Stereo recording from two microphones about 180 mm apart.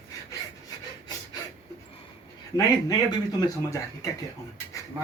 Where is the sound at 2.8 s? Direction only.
20° left (ahead or behind).